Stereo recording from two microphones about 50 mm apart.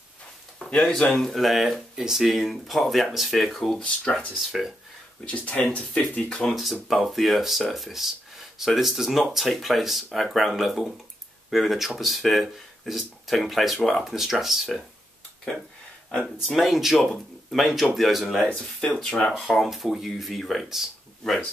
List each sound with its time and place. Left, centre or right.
0.6 s a sound: centre
1.1 s speech: centre
5.3 s speech: left
6.5 s speech: centre
16.1 s speech: centre
16.4 s speech: centre
18.5 s speech: centre
19.4 s speech: centre